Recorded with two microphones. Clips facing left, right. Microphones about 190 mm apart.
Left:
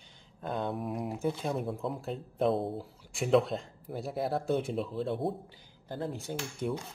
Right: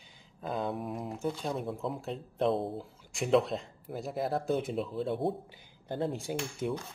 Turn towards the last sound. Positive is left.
turn(degrees=0)  # may be behind; listen again after turning